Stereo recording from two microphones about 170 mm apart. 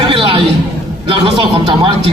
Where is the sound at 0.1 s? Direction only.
30° right (ahead or behind).